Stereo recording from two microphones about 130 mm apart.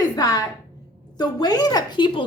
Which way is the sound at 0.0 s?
30° left (ahead or behind).